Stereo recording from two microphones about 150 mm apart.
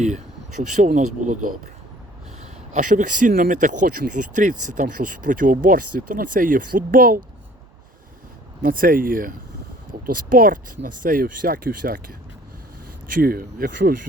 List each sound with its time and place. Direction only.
0.8 s speech: 55° right (ahead or behind)
2.7 s speech: 60° right (ahead or behind)
8.6 s speech: 70° right (ahead or behind)
13.2 s speech: 80° right